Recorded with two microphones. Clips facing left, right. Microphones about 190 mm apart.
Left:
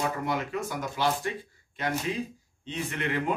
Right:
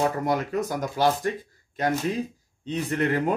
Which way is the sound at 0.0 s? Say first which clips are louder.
Right 5 dB; 40° right (ahead or behind).